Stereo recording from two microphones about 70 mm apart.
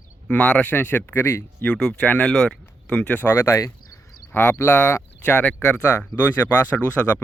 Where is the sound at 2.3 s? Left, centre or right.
Centre.